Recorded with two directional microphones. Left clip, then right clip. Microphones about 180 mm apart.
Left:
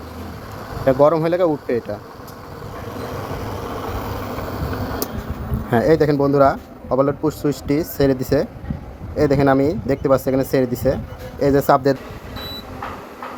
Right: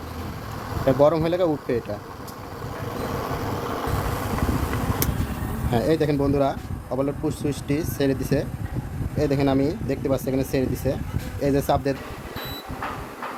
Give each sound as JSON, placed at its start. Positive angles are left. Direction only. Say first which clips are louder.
{"t": 0.9, "sound": "speech", "louder": "left 4 dB", "side_deg": 15}
{"t": 5.7, "sound": "a man's voice", "louder": "left 7 dB", "side_deg": 20}